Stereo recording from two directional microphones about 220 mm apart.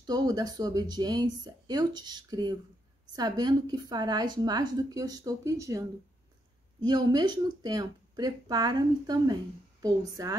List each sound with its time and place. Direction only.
0.0 s a woman's voice: 20° right (ahead or behind)